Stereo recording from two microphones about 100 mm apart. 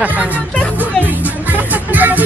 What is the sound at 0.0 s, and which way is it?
Speech, 15° right (ahead or behind).